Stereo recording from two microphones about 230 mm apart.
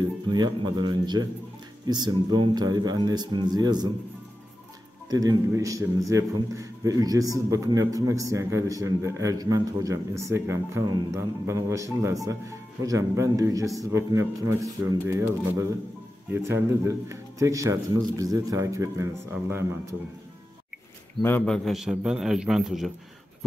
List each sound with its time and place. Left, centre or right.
0.3 s a man's voice: centre
5.1 s a man's voice: centre
21.2 s a man's voice: centre